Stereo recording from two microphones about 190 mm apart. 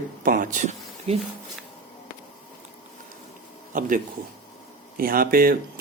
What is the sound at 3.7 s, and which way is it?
Speech, 45° right (ahead or behind).